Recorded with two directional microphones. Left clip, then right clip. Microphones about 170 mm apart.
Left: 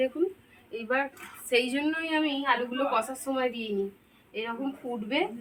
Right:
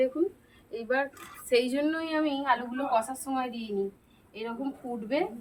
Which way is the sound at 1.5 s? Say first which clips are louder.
Right 1 dB; 50° right (ahead or behind).